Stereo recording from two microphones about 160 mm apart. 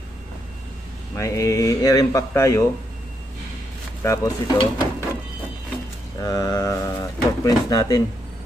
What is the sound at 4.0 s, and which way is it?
Speech, 20° left (ahead or behind).